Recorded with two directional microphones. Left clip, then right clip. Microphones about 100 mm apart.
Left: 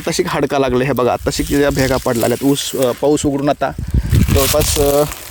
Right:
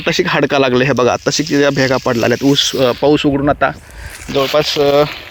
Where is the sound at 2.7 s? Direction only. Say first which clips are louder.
Right 3 dB; 15° right (ahead or behind).